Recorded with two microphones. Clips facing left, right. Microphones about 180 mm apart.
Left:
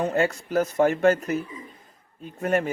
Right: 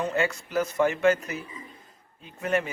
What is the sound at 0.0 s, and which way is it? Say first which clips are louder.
Speech: left 3 dB; 50° left (ahead or behind).